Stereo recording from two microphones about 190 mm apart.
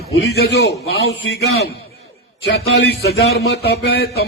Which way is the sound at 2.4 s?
60° left (ahead or behind).